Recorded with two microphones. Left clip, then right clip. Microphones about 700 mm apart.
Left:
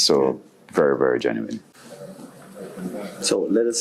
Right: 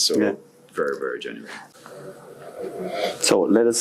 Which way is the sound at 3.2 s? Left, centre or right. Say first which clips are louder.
Right 2 dB; right.